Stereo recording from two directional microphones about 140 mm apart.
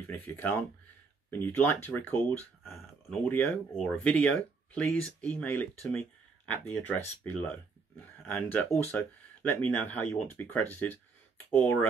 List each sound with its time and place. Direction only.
0.1 s speech: 15° left (ahead or behind)